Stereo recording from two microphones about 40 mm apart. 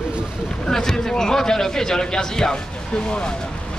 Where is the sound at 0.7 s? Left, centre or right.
Centre.